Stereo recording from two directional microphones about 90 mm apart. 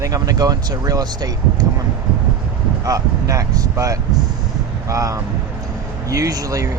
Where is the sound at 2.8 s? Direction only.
40° right (ahead or behind).